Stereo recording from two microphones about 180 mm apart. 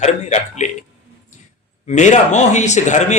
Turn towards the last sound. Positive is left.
turn(degrees=40)  # may be behind; listen again after turning